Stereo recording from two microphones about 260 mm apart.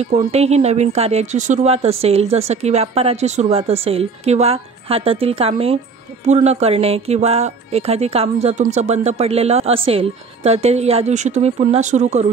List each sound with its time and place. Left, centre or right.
0.1 s speech: right